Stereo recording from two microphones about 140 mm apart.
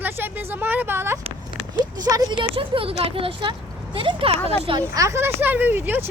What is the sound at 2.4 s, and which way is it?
Speech, 40° right (ahead or behind).